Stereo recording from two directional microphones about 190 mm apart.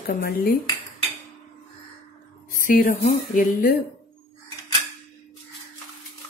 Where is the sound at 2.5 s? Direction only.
45° left (ahead or behind).